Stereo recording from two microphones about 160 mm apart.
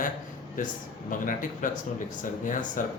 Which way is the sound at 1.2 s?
55° left (ahead or behind).